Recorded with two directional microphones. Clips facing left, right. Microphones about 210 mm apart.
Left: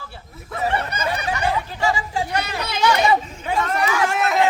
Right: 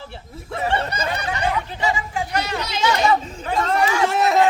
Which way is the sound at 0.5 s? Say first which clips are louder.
Right 1 dB; 30° right (ahead or behind).